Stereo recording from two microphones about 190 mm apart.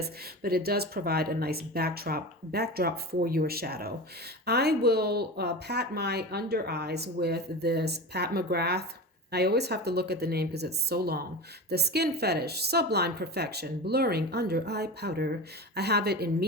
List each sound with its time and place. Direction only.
0.0 s a woman's voice: 55° right (ahead or behind)